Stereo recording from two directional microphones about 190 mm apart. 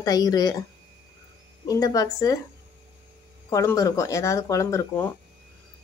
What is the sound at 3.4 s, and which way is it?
Speech, 15° left (ahead or behind).